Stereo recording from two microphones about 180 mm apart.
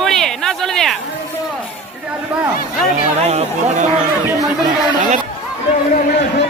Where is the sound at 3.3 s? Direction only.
35° right (ahead or behind).